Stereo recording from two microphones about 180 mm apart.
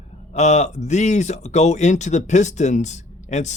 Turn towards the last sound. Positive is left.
turn(degrees=40)  # may be behind; listen again after turning